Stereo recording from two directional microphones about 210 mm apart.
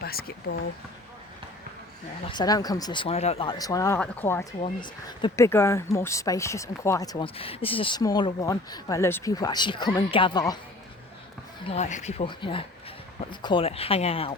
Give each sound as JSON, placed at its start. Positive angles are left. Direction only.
{"t": 0.0, "sound": "speech", "side_deg": 45}
{"t": 2.3, "sound": "speech", "side_deg": 20}
{"t": 4.6, "sound": "speech", "side_deg": 20}
{"t": 11.6, "sound": "speech", "side_deg": 30}